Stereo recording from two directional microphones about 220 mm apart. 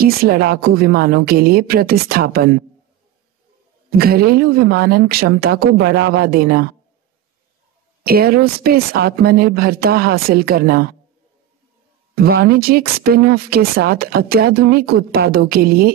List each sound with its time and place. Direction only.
0.0 s speech: 45° right (ahead or behind)
3.9 s speech: 45° right (ahead or behind)
8.0 s speech: 45° right (ahead or behind)
12.2 s speech: 45° right (ahead or behind)